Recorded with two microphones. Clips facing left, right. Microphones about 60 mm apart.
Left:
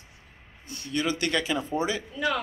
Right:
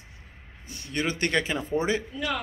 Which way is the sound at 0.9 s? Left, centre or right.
Right.